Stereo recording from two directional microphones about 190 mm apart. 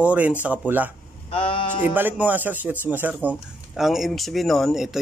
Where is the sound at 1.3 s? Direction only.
30° left (ahead or behind).